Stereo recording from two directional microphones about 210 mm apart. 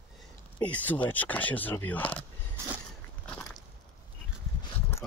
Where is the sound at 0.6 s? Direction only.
10° left (ahead or behind).